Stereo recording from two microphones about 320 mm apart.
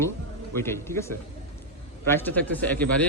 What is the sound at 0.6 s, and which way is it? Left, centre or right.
A man's voice, centre.